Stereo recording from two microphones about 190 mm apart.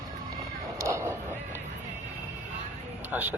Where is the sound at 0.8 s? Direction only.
15° right (ahead or behind).